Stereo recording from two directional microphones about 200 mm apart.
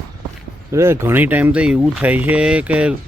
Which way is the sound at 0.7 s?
15° right (ahead or behind).